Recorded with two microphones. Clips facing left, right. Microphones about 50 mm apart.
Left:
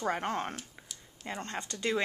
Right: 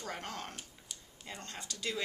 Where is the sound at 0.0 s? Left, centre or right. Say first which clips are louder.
Left 10 dB; left.